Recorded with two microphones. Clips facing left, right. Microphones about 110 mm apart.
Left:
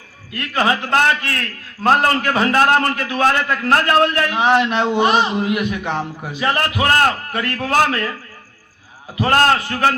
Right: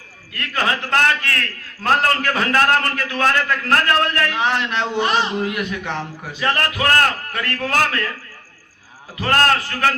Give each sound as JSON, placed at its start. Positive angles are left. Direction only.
{"t": 0.3, "sound": "a man's voice", "side_deg": 20}
{"t": 9.1, "sound": "a man's voice", "side_deg": 20}